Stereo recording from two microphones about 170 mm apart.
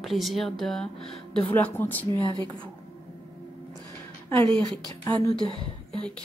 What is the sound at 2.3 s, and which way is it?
Speech, 25° right (ahead or behind).